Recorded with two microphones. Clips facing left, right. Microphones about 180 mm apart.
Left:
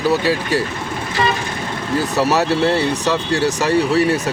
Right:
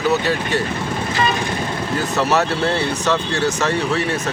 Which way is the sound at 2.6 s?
35° left (ahead or behind).